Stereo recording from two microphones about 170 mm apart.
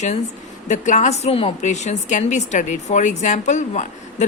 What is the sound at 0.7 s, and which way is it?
A woman's voice, 45° left (ahead or behind).